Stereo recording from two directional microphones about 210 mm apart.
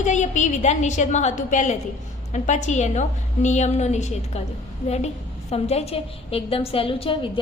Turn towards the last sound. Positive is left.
turn(degrees=25)  # may be behind; listen again after turning